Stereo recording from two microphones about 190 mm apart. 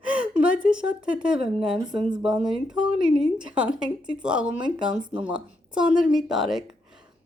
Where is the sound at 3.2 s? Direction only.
5° right (ahead or behind).